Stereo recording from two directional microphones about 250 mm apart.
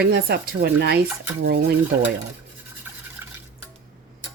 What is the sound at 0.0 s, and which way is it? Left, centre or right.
Speech, right.